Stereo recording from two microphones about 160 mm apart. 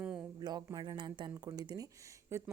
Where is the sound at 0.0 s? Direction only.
10° right (ahead or behind).